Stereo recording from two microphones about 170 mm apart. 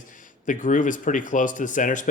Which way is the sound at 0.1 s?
50° left (ahead or behind).